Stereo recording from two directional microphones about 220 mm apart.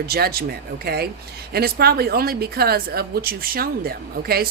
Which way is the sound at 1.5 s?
45° right (ahead or behind).